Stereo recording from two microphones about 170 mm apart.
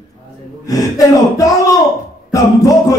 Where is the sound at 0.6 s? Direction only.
20° left (ahead or behind).